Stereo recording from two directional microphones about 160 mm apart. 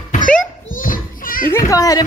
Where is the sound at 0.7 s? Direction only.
60° left (ahead or behind).